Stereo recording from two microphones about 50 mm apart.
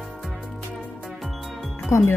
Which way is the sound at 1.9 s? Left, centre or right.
Left.